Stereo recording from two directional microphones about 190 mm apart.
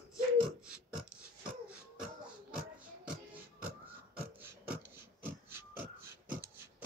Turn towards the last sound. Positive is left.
turn(degrees=-10)  # may be behind; listen again after turning